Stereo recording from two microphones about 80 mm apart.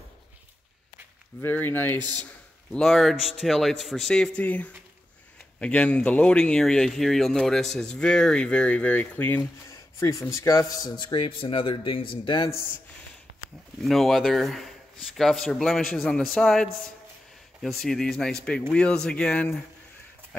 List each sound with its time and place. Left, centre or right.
1.4 s speech: left
2.1 s a sound: centre
2.8 s speech: centre
4.4 s speech: centre
9.7 s a sound: left
10.3 s a man's voice: left
13.7 s speech: centre